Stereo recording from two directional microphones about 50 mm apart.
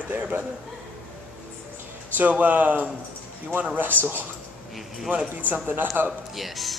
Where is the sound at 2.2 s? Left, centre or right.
Right.